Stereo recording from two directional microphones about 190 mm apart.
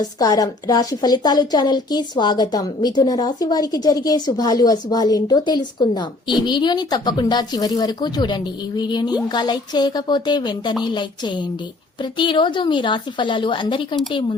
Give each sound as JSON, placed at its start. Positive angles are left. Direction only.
{"t": 0.0, "sound": "a woman's voice", "side_deg": 20}